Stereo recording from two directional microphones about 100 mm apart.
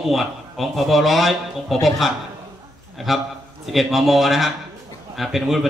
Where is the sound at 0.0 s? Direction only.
Centre (ahead or behind).